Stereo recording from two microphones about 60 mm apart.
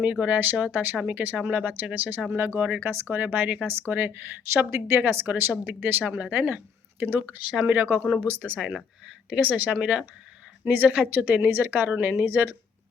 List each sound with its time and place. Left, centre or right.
0.0 s speech: right
4.5 s a woman's voice: right
7.6 s speech: right
8.7 s speech: right